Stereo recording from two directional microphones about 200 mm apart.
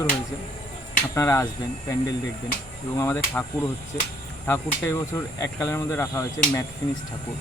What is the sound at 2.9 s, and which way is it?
Speech, 15° left (ahead or behind).